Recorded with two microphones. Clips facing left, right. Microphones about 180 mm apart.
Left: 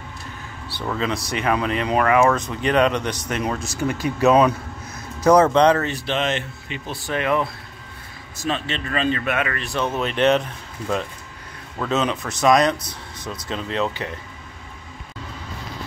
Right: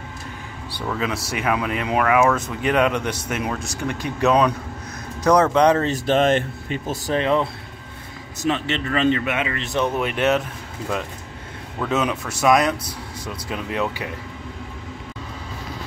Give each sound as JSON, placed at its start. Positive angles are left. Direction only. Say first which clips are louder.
{"t": 0.9, "sound": "speech", "louder": "left 1 dB", "side_deg": -5}
{"t": 5.9, "sound": "speech", "louder": "right 6 dB", "side_deg": -45}
{"t": 8.5, "sound": "speech", "louder": "right 3 dB", "side_deg": -20}
{"t": 11.8, "sound": "speech", "louder": "even", "side_deg": -10}
{"t": 12.7, "sound": "speech", "louder": "right 3 dB", "side_deg": -30}
{"t": 13.5, "sound": "speech", "louder": "left 1 dB", "side_deg": -10}